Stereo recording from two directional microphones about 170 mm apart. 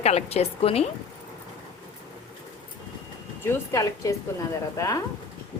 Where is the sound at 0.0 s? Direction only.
40° left (ahead or behind).